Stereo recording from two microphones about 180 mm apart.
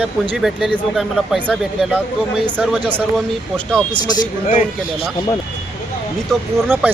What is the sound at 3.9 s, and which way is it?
Speech, 25° left (ahead or behind).